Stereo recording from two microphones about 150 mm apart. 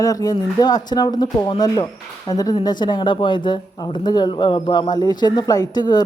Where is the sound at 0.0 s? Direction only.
25° left (ahead or behind).